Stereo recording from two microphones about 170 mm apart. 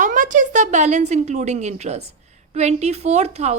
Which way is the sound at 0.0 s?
50° right (ahead or behind).